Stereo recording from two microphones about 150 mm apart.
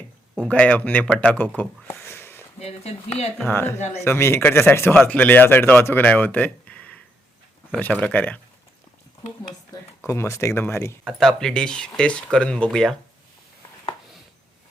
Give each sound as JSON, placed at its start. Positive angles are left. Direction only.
{"t": 0.3, "sound": "speech", "side_deg": 10}
{"t": 2.6, "sound": "speech", "side_deg": 45}
{"t": 3.3, "sound": "speech", "side_deg": 15}
{"t": 3.8, "sound": "speech", "side_deg": 50}
{"t": 4.0, "sound": "speech", "side_deg": 15}
{"t": 10.1, "sound": "speech", "side_deg": 15}
{"t": 11.0, "sound": "speech", "side_deg": 5}